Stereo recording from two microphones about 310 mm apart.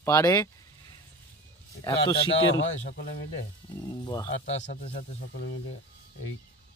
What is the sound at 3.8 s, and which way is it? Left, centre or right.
Speech, centre.